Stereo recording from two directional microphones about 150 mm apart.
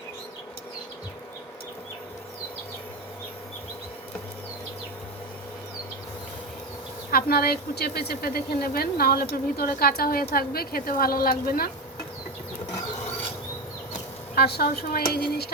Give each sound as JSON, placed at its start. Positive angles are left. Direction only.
{"t": 7.1, "sound": "speech", "side_deg": 85}
{"t": 14.3, "sound": "speech", "side_deg": 90}